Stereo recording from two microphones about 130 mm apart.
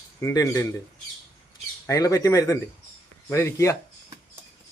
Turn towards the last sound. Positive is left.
turn(degrees=20)  # may be behind; listen again after turning